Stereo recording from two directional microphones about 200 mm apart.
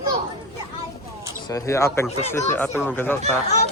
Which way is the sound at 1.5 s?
15° left (ahead or behind).